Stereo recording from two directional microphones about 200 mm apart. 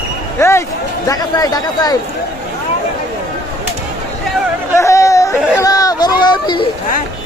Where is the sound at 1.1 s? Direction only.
20° left (ahead or behind).